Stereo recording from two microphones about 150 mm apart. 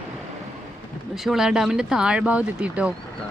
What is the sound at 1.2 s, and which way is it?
A woman's voice, centre (ahead or behind).